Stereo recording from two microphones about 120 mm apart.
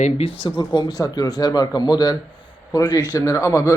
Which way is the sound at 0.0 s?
55° left (ahead or behind).